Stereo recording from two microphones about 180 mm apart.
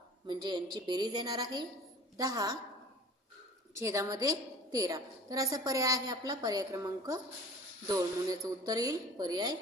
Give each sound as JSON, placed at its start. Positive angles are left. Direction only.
{"t": 0.3, "sound": "a woman's voice", "side_deg": -25}
{"t": 3.8, "sound": "a woman's voice", "side_deg": -15}